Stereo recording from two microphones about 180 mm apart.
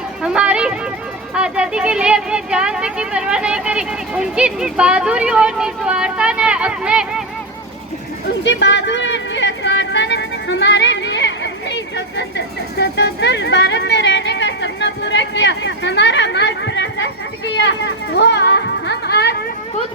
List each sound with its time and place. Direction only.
0.2 s a sound: 5° right (ahead or behind)
1.3 s speech: 5° right (ahead or behind)
8.4 s music: 75° left (ahead or behind)
12.7 s speech: 70° left (ahead or behind)